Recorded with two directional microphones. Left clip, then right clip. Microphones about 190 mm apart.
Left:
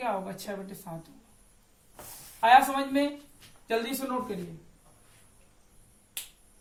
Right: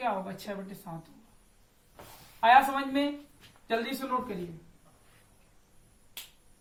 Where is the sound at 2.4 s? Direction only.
25° left (ahead or behind).